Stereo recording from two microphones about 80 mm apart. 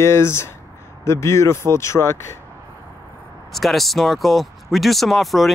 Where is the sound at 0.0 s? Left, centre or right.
Left.